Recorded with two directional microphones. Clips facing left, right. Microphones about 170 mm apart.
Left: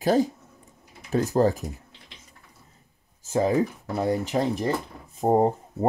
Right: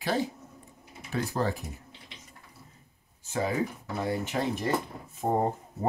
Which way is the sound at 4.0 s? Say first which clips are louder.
Left 6 dB; 35° left (ahead or behind).